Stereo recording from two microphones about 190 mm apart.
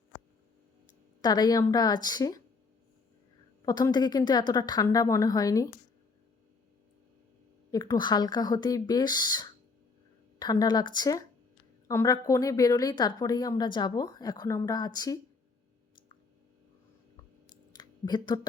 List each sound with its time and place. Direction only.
1.2 s speech: 20° left (ahead or behind)
3.7 s speech: 20° left (ahead or behind)
7.7 s speech: 20° left (ahead or behind)
17.7 s a sound: 20° left (ahead or behind)